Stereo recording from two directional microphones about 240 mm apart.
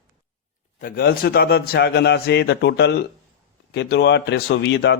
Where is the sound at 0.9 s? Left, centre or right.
Left.